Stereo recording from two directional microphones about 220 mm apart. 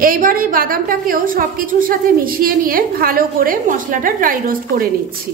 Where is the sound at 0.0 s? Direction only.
40° right (ahead or behind).